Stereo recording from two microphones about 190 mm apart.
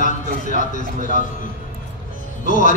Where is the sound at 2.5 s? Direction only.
45° left (ahead or behind).